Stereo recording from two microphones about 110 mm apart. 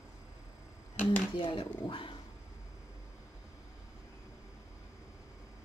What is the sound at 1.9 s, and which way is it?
Dog, 50° left (ahead or behind).